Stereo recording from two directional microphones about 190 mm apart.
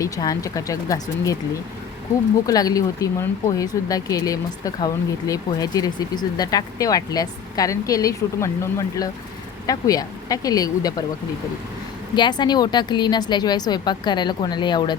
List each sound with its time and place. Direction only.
0.0 s speech: 20° left (ahead or behind)
2.5 s speech: 20° left (ahead or behind)
12.1 s speech: 25° left (ahead or behind)